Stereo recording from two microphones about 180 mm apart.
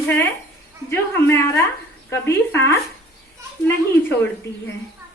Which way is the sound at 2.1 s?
15° left (ahead or behind).